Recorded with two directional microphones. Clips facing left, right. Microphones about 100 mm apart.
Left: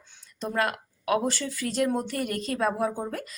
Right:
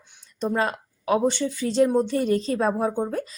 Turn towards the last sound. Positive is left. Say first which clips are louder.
# right 4 dB
turn(degrees=-25)  # may be behind; listen again after turning